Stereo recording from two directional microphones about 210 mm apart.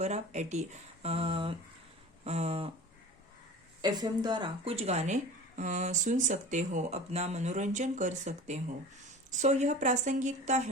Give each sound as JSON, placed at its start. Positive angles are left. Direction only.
{"t": 0.0, "sound": "speech", "side_deg": -35}
{"t": 3.8, "sound": "speech", "side_deg": -20}